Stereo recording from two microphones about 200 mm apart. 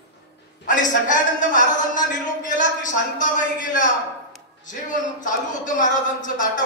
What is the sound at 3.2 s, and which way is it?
Speech, 40° left (ahead or behind).